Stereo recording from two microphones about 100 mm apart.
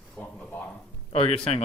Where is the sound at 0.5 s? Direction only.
20° left (ahead or behind).